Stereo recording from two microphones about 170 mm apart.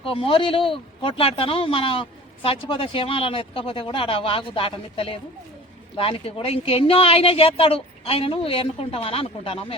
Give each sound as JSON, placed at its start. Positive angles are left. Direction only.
{"t": 0.0, "sound": "speech", "side_deg": 30}